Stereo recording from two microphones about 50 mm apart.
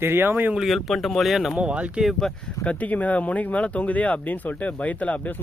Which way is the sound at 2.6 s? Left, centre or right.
Left.